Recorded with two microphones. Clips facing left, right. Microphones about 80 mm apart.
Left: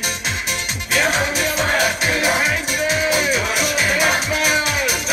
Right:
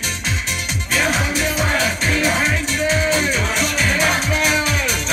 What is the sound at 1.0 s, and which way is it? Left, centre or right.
Music, centre.